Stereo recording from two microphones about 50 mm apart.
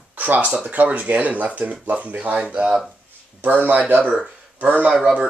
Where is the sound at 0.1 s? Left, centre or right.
Right.